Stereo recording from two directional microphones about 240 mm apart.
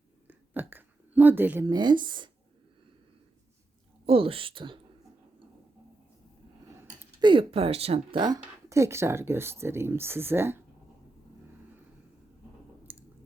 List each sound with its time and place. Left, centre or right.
0.3 s a sound: centre
4.0 s speech: right
7.2 s speech: right
12.9 s chewing: centre